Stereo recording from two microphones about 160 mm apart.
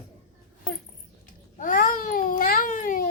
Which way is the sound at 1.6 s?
55° left (ahead or behind).